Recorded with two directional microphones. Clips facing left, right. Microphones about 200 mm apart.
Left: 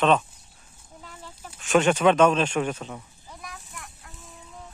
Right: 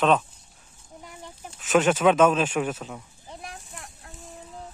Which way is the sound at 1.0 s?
20° right (ahead or behind).